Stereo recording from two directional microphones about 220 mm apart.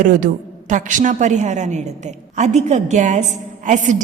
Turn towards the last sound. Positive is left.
turn(degrees=-35)  # may be behind; listen again after turning